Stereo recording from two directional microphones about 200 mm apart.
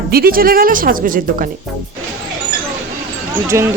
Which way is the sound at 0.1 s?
45° right (ahead or behind).